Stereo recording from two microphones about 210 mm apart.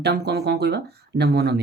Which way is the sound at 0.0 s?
55° right (ahead or behind).